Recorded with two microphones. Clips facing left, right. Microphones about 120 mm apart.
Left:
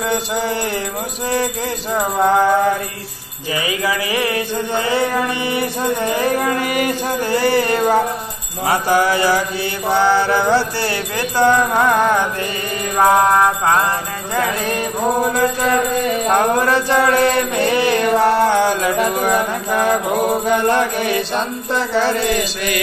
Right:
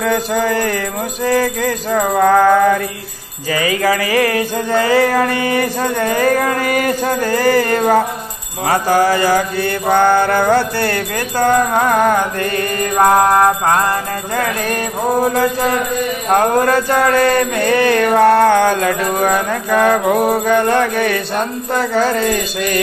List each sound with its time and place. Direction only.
0.0 s mantra: 45° right (ahead or behind)
4.2 s music: 40° right (ahead or behind)
5.0 s mantra: 90° right
5.8 s mantra: 50° right (ahead or behind)
16.3 s mantra: 40° right (ahead or behind)
19.2 s music: 60° right (ahead or behind)
20.4 s mantra: 60° right (ahead or behind)